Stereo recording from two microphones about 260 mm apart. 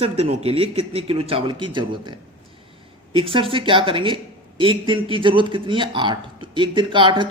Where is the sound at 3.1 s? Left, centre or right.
Right.